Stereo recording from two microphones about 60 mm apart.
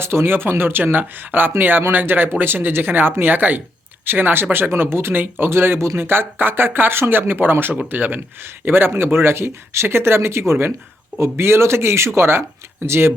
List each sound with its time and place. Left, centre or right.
0.0 s speech: right